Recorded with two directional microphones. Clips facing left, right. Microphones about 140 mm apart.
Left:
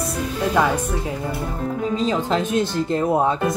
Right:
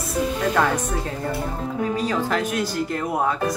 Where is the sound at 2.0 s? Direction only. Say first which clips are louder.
Left 2 dB; 25° left (ahead or behind).